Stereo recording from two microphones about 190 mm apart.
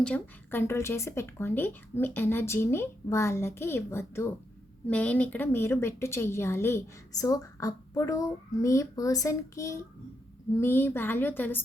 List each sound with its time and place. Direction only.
0.0 s speech: 10° left (ahead or behind)